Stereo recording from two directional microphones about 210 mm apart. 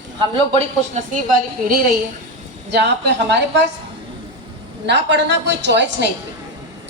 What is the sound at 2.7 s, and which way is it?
Speech, 55° right (ahead or behind).